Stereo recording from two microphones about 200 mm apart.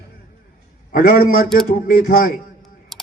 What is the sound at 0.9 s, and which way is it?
A man's voice, 45° left (ahead or behind).